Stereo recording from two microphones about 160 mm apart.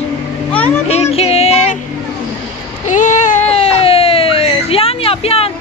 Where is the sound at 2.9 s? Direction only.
50° left (ahead or behind).